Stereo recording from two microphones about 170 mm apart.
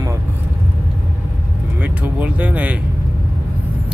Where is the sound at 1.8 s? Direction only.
10° right (ahead or behind).